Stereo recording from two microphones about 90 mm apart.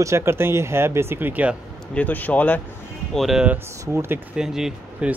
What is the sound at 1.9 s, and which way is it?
Speech, 20° left (ahead or behind).